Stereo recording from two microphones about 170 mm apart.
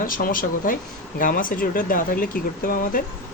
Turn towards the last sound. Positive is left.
turn(degrees=55)  # may be behind; listen again after turning